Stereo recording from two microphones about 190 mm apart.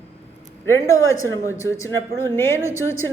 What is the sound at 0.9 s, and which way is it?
A woman's voice, 15° left (ahead or behind).